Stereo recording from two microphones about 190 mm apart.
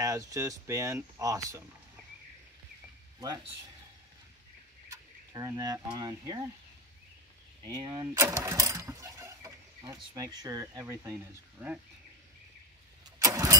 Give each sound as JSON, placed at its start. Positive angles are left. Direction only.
{"t": 0.0, "sound": "speech", "side_deg": -20}
{"t": 3.2, "sound": "speech", "side_deg": -20}
{"t": 4.8, "sound": "speech", "side_deg": -15}
{"t": 7.7, "sound": "speech", "side_deg": -25}
{"t": 8.1, "sound": "engine", "side_deg": -15}
{"t": 10.1, "sound": "speech", "side_deg": -20}
{"t": 13.2, "sound": "vehicle", "side_deg": -15}